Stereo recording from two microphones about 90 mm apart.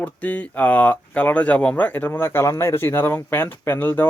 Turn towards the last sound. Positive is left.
turn(degrees=25)  # may be behind; listen again after turning